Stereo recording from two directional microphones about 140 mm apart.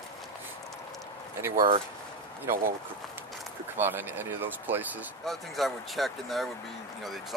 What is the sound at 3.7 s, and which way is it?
Speech, 15° right (ahead or behind).